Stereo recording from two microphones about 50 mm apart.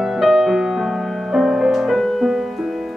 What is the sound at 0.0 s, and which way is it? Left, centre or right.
Music, centre.